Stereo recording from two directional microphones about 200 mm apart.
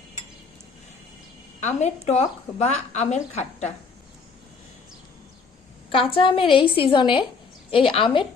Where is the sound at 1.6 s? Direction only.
35° left (ahead or behind).